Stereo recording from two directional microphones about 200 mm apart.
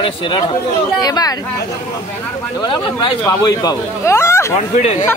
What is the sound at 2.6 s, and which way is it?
Speech, 25° left (ahead or behind).